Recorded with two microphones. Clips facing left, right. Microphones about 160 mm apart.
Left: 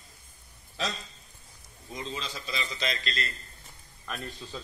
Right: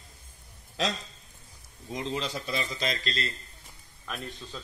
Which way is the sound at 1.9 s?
65° right (ahead or behind).